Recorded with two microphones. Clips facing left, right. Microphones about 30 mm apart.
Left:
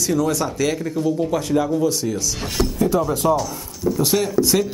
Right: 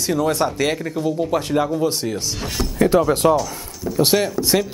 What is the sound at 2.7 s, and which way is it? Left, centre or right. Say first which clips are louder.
Speech: right 6 dB; right.